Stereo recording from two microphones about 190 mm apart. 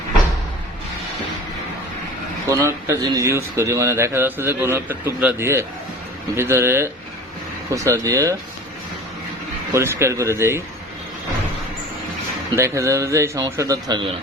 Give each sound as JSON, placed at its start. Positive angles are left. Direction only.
{"t": 2.5, "sound": "speech", "side_deg": -15}
{"t": 9.7, "sound": "speech", "side_deg": -15}
{"t": 12.5, "sound": "speech", "side_deg": -15}